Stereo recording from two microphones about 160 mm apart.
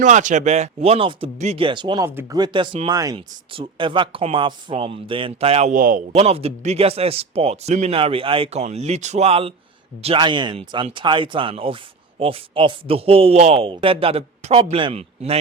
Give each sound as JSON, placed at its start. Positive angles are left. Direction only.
{"t": 0.0, "sound": "speech", "side_deg": -50}
{"t": 2.0, "sound": "speech", "side_deg": -15}
{"t": 2.4, "sound": "speech", "side_deg": -30}
{"t": 5.7, "sound": "speech", "side_deg": -60}
{"t": 6.1, "sound": "a man's voice", "side_deg": -40}